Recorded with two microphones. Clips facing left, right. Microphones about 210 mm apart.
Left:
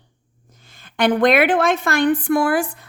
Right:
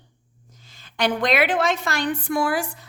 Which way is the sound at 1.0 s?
55° left (ahead or behind).